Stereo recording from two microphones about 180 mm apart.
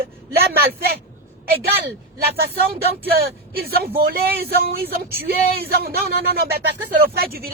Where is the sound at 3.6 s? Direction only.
55° right (ahead or behind).